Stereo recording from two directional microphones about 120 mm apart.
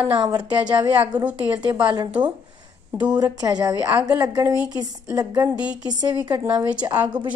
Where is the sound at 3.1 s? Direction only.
30° right (ahead or behind).